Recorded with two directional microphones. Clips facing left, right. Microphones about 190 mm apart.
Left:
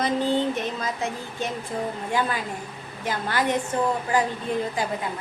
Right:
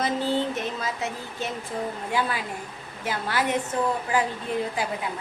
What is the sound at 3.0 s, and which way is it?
Speech, 5° right (ahead or behind).